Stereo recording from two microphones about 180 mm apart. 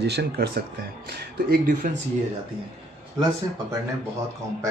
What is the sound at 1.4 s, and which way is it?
Speech, 45° right (ahead or behind).